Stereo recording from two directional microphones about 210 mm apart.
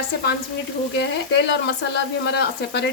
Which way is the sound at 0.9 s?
55° left (ahead or behind).